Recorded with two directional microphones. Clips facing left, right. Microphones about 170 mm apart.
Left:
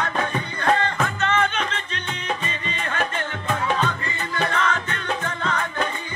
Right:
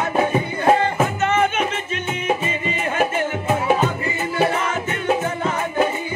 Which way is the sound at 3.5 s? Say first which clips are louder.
Right 4 dB; 10° right (ahead or behind).